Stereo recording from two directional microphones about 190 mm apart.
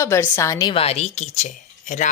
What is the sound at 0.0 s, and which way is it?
A woman's voice, 15° left (ahead or behind).